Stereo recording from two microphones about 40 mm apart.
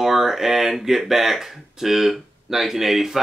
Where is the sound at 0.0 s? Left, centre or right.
Centre.